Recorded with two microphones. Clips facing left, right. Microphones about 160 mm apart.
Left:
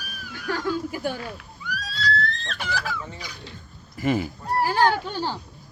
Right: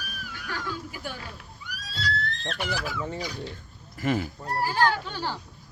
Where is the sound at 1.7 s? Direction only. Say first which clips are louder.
Left 5 dB; 90° left.